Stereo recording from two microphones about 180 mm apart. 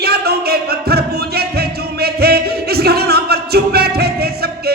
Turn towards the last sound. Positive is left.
turn(degrees=-60)  # may be behind; listen again after turning